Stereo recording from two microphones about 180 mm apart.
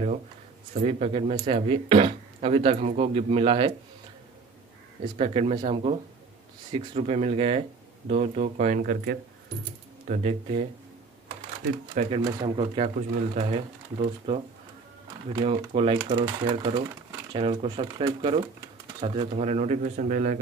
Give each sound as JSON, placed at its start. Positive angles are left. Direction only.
{"t": 0.7, "sound": "speech", "side_deg": -35}
{"t": 5.1, "sound": "speech", "side_deg": -35}
{"t": 12.1, "sound": "speech", "side_deg": -30}
{"t": 15.4, "sound": "speech", "side_deg": -35}